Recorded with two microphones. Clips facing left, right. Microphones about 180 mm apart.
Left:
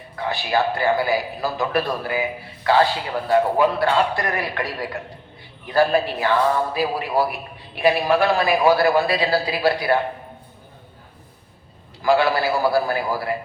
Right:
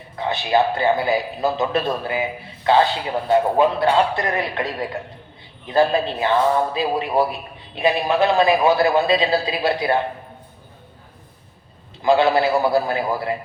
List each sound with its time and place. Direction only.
0.3 s a man's voice: 20° right (ahead or behind)
12.0 s a man's voice: 20° right (ahead or behind)